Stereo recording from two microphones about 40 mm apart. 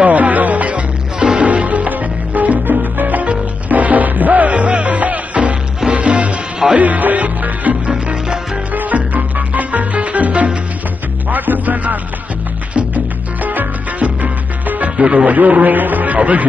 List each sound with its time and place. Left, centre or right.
0.0 s music: right
7.9 s music: right
8.7 s music: right
11.2 s music: right
15.0 s music: right
15.2 s a man's voice: right